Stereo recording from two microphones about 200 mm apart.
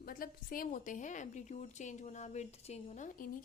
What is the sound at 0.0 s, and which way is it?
A woman's voice, 45° left (ahead or behind).